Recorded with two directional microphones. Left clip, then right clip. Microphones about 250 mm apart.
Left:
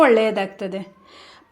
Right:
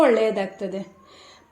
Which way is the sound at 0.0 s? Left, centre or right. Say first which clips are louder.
Left 3 dB; left.